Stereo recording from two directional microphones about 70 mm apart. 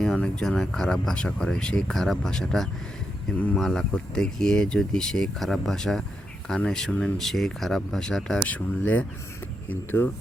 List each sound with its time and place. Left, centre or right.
0.2 s speech: centre
8.4 s speech: left